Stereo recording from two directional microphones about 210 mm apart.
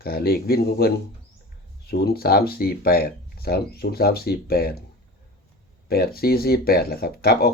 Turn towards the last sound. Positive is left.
turn(degrees=45)  # may be behind; listen again after turning